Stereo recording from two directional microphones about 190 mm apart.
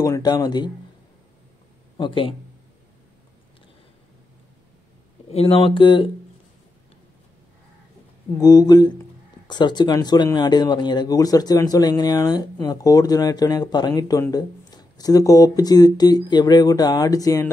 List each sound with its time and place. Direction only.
0.0 s speech: 20° left (ahead or behind)
2.0 s speech: 25° left (ahead or behind)
5.3 s speech: 30° left (ahead or behind)
8.4 s speech: 20° left (ahead or behind)